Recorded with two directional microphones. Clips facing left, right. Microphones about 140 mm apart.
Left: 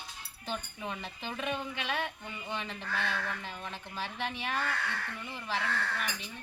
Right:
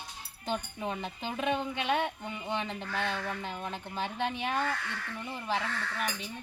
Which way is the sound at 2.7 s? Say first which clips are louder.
Right 2 dB; 40° right (ahead or behind).